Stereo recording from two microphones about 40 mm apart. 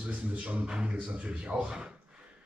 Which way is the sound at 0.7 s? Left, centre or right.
Centre.